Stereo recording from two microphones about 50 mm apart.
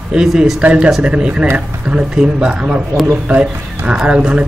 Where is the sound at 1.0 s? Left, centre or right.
Right.